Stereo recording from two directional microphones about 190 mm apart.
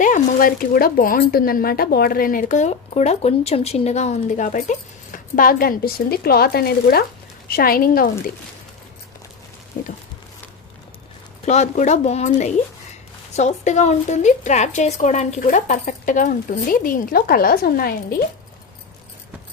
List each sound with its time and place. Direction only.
0.0 s speech: 45° left (ahead or behind)
9.7 s a sound: 50° left (ahead or behind)
11.4 s a woman's voice: 35° left (ahead or behind); by 18.3 s 50° left (ahead or behind)